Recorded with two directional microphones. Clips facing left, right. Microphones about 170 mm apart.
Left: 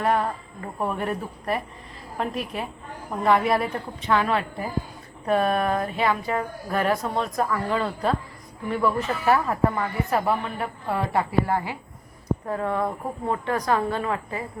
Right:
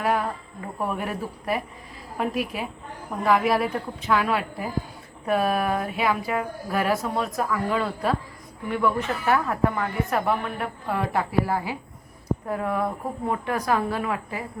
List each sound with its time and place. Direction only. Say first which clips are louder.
0.0 s a woman's voice: left 1 dB; 5° right (ahead or behind)